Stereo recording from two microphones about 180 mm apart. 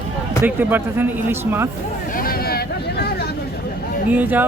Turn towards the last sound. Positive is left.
turn(degrees=-10)  # may be behind; listen again after turning